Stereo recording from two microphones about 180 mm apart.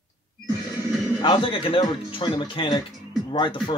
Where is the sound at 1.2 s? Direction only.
25° left (ahead or behind).